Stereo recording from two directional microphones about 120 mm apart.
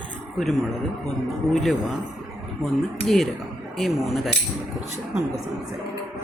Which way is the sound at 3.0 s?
5° left (ahead or behind).